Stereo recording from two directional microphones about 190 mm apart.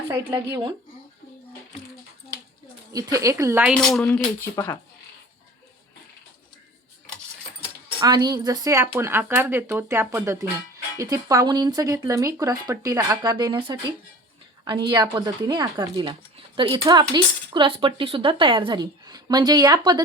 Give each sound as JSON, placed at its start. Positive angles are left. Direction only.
{"t": 0.1, "sound": "speech", "side_deg": -10}
{"t": 2.9, "sound": "speech", "side_deg": -15}
{"t": 3.8, "sound": "speech", "side_deg": 5}
{"t": 4.5, "sound": "speech", "side_deg": 15}
{"t": 8.0, "sound": "a woman's voice", "side_deg": -20}